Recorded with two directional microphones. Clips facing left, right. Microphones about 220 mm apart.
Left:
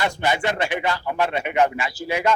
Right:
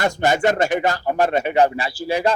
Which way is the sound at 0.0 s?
45° right (ahead or behind).